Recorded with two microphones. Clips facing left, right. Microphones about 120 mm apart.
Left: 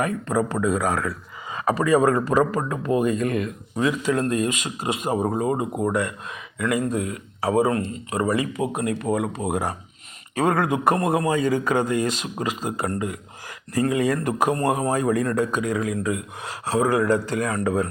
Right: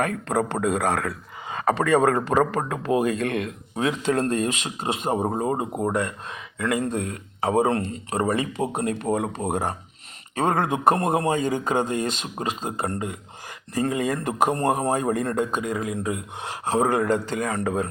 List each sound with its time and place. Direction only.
0.0 s speech: 65° right (ahead or behind)
2.8 s speech: 70° right (ahead or behind)
4.1 s speech: 35° right (ahead or behind)
14.0 s speech: 20° right (ahead or behind)